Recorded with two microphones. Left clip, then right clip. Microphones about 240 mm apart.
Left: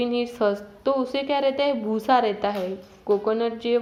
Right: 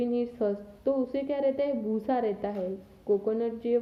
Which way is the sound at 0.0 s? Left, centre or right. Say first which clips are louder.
Left 6 dB; centre.